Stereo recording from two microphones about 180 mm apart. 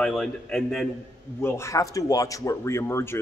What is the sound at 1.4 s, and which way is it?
A man's voice, 15° left (ahead or behind).